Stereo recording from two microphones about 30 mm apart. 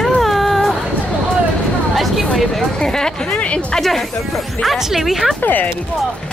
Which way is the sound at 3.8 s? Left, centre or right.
Centre.